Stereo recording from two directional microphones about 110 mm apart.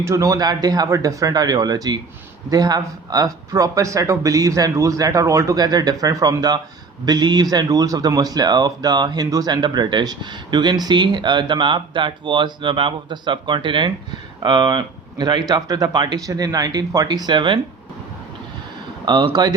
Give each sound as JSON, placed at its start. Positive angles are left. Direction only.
{"t": 0.0, "sound": "speech", "side_deg": -30}
{"t": 19.0, "sound": "speech", "side_deg": -40}